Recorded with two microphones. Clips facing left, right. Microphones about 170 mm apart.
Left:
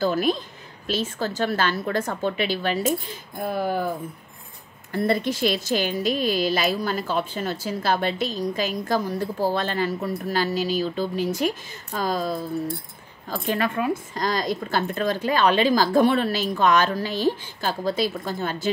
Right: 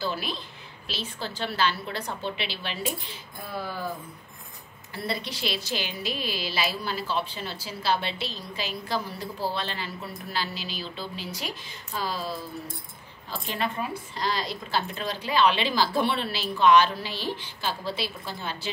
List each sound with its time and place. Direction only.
0.0 s speech: 45° left (ahead or behind)
4.9 s speech: 50° left (ahead or behind)